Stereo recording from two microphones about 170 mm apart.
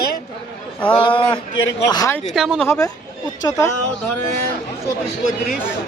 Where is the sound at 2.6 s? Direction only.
20° left (ahead or behind).